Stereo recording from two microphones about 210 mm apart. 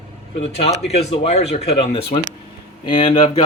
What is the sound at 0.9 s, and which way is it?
Speech, 30° left (ahead or behind).